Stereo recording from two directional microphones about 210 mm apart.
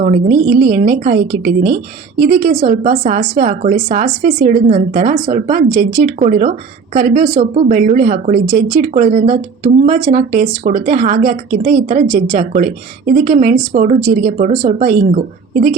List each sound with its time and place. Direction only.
0.0 s a woman's voice: 40° right (ahead or behind)